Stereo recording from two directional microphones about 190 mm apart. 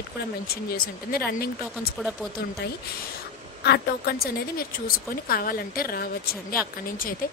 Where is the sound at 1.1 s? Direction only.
55° left (ahead or behind).